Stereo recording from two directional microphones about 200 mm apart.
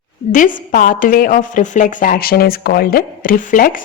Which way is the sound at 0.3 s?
40° left (ahead or behind).